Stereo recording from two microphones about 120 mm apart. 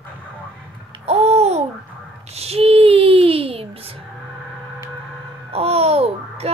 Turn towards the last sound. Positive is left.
turn(degrees=-60)  # may be behind; listen again after turning